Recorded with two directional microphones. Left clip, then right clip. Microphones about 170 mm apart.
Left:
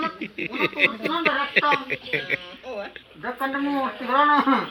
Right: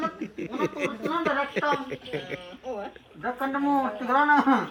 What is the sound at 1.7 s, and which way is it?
Speech, centre (ahead or behind).